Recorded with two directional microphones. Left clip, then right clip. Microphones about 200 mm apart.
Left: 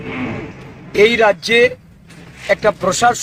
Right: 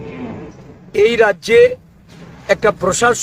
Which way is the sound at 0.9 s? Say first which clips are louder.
Left 1 dB; 25° right (ahead or behind).